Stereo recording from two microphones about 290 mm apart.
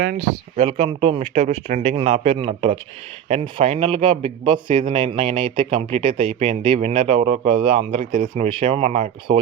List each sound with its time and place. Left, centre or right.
0.0 s a man's voice: right
8.1 s speech: right
8.4 s speech: centre